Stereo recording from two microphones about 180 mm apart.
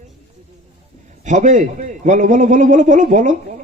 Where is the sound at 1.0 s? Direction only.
40° right (ahead or behind).